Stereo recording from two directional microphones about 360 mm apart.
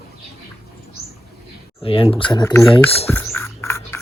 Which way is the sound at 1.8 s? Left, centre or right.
Centre.